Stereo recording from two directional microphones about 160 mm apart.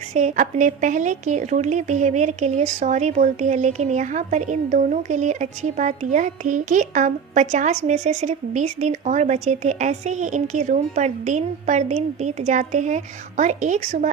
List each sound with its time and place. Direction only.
0.1 s a woman's voice: 50° right (ahead or behind)